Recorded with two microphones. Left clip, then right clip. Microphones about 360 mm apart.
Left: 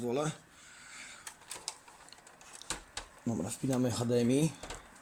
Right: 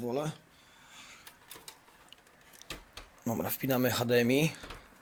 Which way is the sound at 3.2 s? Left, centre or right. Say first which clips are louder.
Right 3 dB; right.